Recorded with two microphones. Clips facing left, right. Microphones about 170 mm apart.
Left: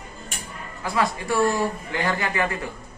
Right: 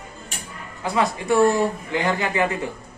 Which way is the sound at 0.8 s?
20° right (ahead or behind).